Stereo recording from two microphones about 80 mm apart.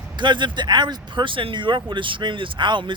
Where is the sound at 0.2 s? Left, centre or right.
Right.